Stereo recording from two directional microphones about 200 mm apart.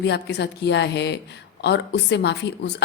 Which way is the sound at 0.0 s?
55° left (ahead or behind).